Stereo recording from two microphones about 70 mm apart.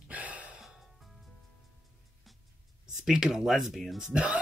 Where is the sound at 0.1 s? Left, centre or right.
Right.